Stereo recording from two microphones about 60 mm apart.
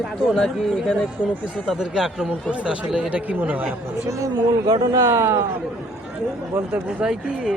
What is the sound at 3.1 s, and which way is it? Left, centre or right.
Speech, right.